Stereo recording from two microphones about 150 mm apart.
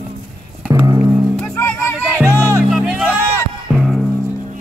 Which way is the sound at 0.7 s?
15° right (ahead or behind).